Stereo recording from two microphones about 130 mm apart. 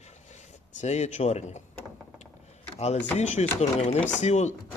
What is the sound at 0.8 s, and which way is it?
Speech, 65° left (ahead or behind).